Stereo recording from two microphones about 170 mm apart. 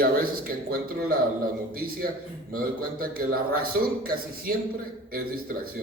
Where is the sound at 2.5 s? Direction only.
60° right (ahead or behind).